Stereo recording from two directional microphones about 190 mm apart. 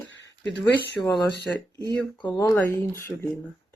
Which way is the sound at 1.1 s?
20° left (ahead or behind).